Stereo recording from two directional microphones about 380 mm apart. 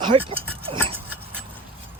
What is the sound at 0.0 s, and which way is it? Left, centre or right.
Speech, centre.